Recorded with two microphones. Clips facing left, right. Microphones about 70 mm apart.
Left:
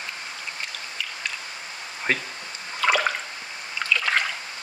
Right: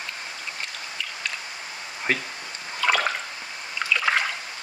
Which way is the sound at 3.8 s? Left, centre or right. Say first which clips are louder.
Right 1 dB; centre.